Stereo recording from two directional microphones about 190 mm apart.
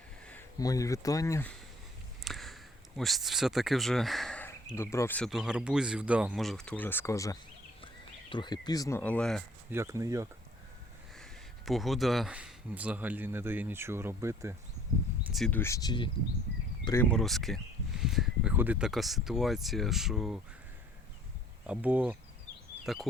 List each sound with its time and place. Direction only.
0.6 s speech: 20° left (ahead or behind)
2.2 s speech: centre (ahead or behind); by 9.0 s 20° left (ahead or behind)
9.0 s speech: 5° left (ahead or behind)
9.6 s speech: 15° right (ahead or behind)
11.2 s speech: centre (ahead or behind)
15.3 s speech: 5° left (ahead or behind)
17.1 s speech: centre (ahead or behind)
21.7 s speech: 10° right (ahead or behind)